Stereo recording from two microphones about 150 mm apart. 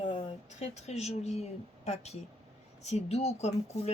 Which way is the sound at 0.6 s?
45° left (ahead or behind).